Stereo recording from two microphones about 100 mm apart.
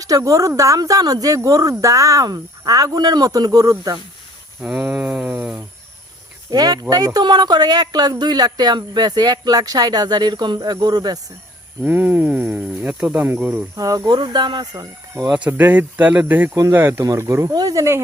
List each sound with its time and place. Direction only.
0.0 s speech: 35° right (ahead or behind)
4.6 s speech: 10° right (ahead or behind)
6.5 s speech: 40° right (ahead or behind)
11.8 s speech: 20° right (ahead or behind)
13.7 s speech: 35° right (ahead or behind)
15.4 s speech: 20° right (ahead or behind)
17.0 s speech: 35° right (ahead or behind)